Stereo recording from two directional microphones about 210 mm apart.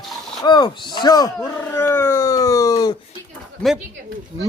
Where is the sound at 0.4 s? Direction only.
20° left (ahead or behind).